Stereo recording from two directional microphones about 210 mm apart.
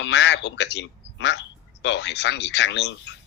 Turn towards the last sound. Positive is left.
turn(degrees=55)  # may be behind; listen again after turning